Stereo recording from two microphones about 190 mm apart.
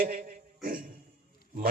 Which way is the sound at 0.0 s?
50° right (ahead or behind).